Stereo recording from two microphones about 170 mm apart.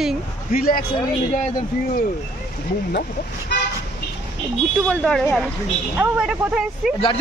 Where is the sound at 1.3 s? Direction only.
50° left (ahead or behind).